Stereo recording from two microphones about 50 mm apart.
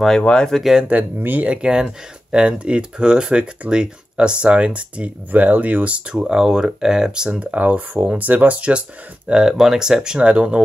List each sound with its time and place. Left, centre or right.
0.2 s speech: centre
0.5 s speech: centre
1.4 s speech: right
6.1 s speech: centre
7.2 s speech: right